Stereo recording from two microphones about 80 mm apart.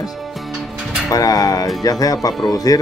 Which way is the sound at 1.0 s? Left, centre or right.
Left.